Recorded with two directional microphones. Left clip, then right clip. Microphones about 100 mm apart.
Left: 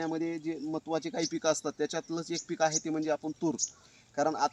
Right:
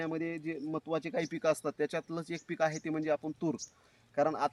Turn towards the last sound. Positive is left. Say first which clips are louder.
# left 1 dB
turn(degrees=-40)  # may be behind; listen again after turning